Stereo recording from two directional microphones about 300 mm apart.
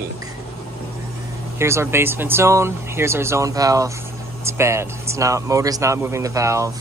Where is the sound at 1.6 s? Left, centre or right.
Centre.